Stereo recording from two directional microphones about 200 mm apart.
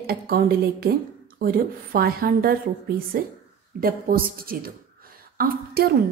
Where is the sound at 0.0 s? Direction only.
50° right (ahead or behind).